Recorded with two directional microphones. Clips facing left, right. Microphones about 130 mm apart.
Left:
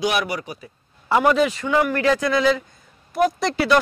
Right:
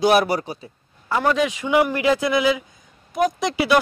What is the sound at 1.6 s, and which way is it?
Speech, 15° right (ahead or behind).